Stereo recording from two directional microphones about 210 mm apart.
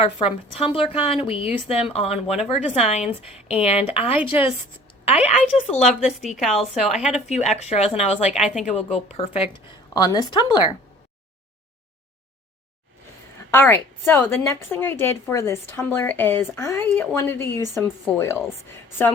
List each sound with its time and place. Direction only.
0.2 s a woman's voice: 25° left (ahead or behind)
3.1 s a woman's voice: 5° right (ahead or behind)
3.7 s a woman's voice: 30° left (ahead or behind)
5.9 s a woman's voice: centre (ahead or behind)
7.3 s speech: 30° left (ahead or behind)
8.4 s a woman's voice: 5° right (ahead or behind)
8.7 s a woman's voice: 30° left (ahead or behind)
13.5 s a woman's voice: 10° left (ahead or behind)